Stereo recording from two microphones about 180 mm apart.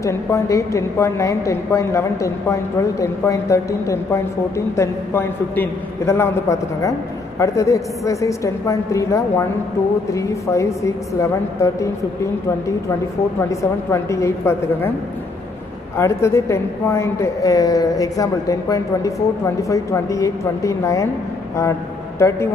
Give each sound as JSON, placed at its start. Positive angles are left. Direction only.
{"t": 0.0, "sound": "a woman's voice", "side_deg": 15}
{"t": 13.5, "sound": "a woman's voice", "side_deg": 15}
{"t": 16.0, "sound": "a woman's voice", "side_deg": 15}